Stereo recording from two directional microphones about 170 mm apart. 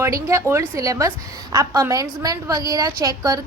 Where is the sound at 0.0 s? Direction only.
15° right (ahead or behind).